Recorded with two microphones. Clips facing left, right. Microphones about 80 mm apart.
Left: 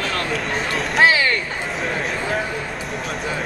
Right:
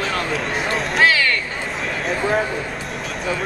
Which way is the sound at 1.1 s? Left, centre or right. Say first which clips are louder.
Even; left.